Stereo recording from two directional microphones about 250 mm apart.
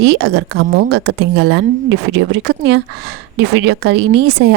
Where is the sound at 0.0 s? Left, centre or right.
Right.